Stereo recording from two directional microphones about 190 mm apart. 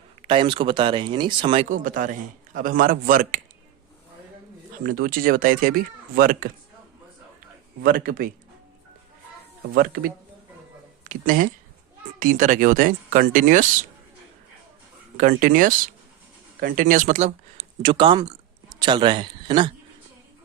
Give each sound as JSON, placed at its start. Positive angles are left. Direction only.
{"t": 0.2, "sound": "speech", "side_deg": -25}
{"t": 1.7, "sound": "speech", "side_deg": -45}
{"t": 4.8, "sound": "speech", "side_deg": -50}
{"t": 7.8, "sound": "speech", "side_deg": -50}
{"t": 9.7, "sound": "speech", "side_deg": -50}
{"t": 15.2, "sound": "a man's voice", "side_deg": -45}